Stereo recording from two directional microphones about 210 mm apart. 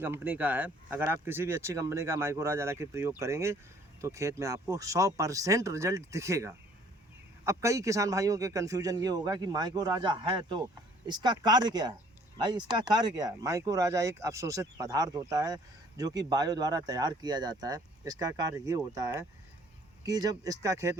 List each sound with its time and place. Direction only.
0.0 s speech: 10° right (ahead or behind)